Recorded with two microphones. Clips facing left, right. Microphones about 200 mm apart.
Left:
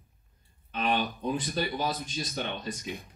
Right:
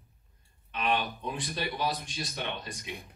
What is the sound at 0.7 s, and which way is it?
Speech, 35° left (ahead or behind).